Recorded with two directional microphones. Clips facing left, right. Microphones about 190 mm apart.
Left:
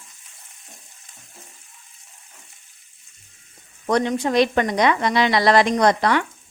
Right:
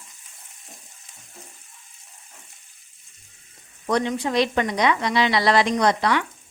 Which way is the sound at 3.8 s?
45° left (ahead or behind).